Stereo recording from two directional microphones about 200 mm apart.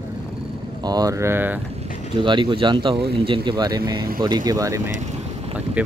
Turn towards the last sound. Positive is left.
turn(degrees=-15)  # may be behind; listen again after turning